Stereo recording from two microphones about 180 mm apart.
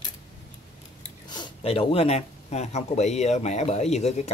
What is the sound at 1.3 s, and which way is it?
Speech, 25° left (ahead or behind).